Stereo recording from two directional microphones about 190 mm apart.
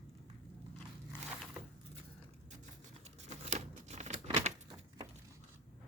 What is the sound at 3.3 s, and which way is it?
Scissors, 35° right (ahead or behind).